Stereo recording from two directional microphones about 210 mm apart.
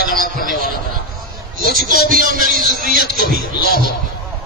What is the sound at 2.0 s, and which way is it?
Speech, 40° right (ahead or behind).